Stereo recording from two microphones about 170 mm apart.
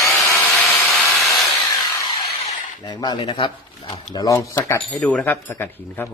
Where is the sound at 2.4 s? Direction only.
40° left (ahead or behind).